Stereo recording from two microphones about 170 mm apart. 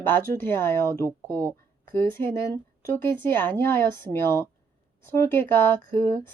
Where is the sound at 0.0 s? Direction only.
10° left (ahead or behind).